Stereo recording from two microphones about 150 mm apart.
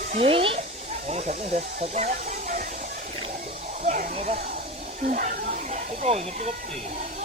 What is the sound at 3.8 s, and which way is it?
Hiss, 60° right (ahead or behind).